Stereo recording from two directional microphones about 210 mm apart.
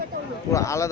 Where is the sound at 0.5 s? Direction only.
15° left (ahead or behind).